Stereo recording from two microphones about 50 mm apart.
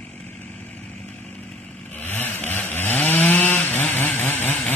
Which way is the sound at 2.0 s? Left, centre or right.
Left.